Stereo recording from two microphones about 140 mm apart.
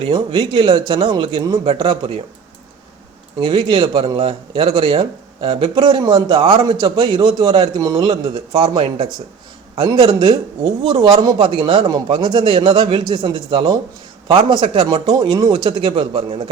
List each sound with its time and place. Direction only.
0.0 s speech: 35° right (ahead or behind)
3.4 s speech: 35° right (ahead or behind)